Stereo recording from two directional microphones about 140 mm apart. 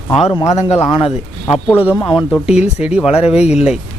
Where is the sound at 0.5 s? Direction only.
50° left (ahead or behind).